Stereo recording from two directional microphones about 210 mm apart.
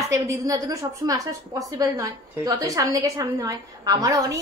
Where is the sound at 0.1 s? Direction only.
15° right (ahead or behind).